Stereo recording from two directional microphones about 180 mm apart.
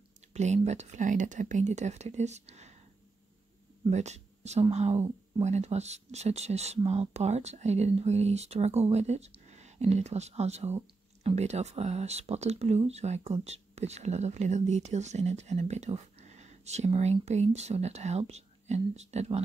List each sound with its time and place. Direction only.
0.3 s a sound: 40° right (ahead or behind)
0.6 s speech: 40° right (ahead or behind)
3.9 s speech: 40° right (ahead or behind)